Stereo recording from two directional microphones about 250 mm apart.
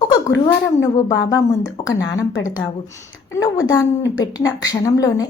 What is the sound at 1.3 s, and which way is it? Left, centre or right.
A woman's voice, centre.